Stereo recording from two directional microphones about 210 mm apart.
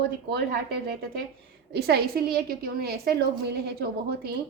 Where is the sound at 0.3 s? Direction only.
50° right (ahead or behind).